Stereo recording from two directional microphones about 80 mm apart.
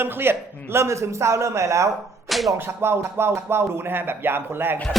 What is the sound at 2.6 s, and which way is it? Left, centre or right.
Speech, right.